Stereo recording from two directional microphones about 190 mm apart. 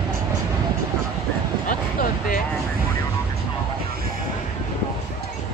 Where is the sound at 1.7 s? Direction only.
45° left (ahead or behind).